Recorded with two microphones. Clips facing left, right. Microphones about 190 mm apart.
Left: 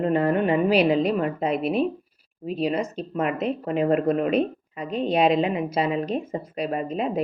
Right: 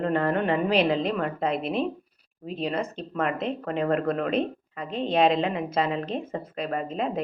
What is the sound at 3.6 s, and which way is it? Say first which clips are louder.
Speech: left 4 dB; 10° left (ahead or behind).